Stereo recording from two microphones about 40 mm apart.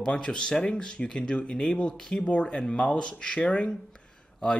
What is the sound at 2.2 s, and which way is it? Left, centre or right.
Speech, left.